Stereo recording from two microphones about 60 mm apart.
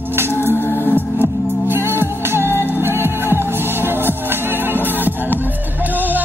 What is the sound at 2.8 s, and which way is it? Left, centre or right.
Music, right.